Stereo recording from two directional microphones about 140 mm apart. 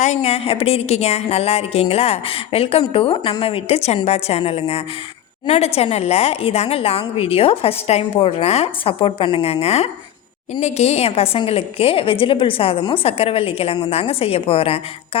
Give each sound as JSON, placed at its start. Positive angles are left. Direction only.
{"t": 0.0, "sound": "a woman's voice", "side_deg": 50}